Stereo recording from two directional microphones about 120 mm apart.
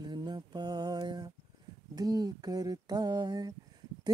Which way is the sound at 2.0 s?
30° right (ahead or behind).